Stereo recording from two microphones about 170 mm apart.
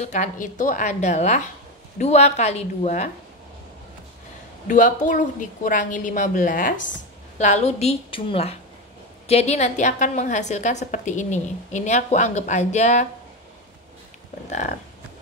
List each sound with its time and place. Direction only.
0.0 s a woman's voice: 45° left (ahead or behind)
4.6 s a woman's voice: 50° left (ahead or behind)